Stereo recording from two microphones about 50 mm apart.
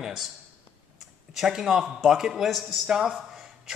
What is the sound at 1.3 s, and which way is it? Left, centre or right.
Speech, centre.